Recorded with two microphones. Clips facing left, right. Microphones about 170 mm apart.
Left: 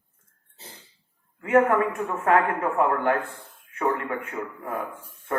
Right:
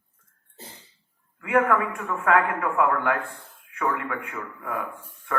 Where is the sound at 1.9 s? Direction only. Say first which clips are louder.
Left 1 dB; 35° left (ahead or behind).